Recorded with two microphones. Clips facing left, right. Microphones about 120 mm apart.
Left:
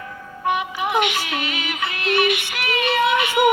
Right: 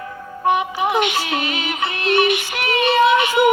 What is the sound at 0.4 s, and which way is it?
Music, 30° right (ahead or behind).